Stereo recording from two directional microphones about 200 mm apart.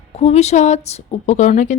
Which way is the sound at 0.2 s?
30° left (ahead or behind).